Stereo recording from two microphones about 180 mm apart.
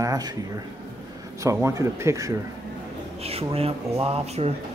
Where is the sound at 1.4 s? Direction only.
15° right (ahead or behind).